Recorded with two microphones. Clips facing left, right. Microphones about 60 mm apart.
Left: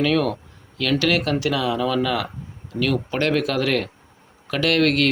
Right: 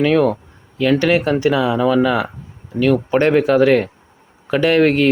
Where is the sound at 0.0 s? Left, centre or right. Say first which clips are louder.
Right 6 dB; centre.